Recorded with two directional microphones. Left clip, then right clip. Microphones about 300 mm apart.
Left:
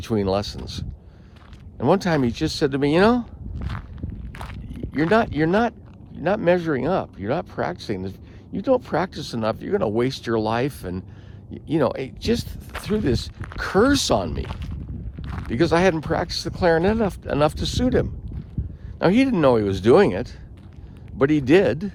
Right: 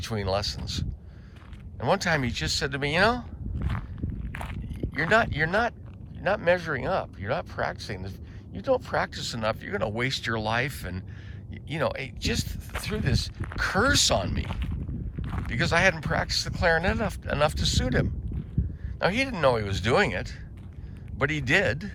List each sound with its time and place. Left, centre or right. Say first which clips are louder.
0.0 s speech: left 6 dB; centre
4.3 s walk: left 1 dB; centre
4.9 s speech: left 3 dB; centre